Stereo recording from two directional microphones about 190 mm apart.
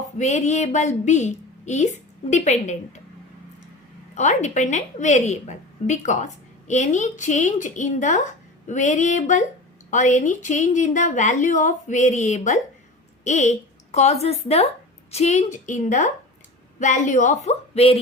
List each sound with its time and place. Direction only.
0.2 s a woman's voice: 40° left (ahead or behind)
4.1 s a woman's voice: 40° left (ahead or behind)